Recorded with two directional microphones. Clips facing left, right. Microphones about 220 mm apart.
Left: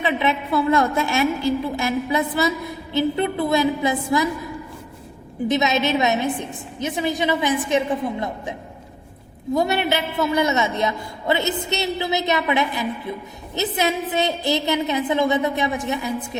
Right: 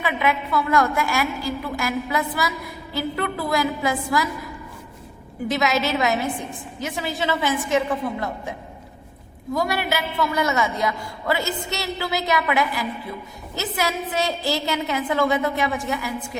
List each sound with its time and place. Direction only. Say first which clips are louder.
0.0 s a man's voice: left 2 dB; 25° left (ahead or behind)
5.5 s a man's voice: left 2 dB; 20° left (ahead or behind)